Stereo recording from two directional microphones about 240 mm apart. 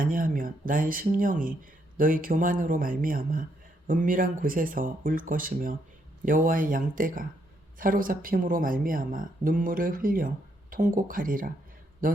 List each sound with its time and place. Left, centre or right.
0.0 s a man's voice: right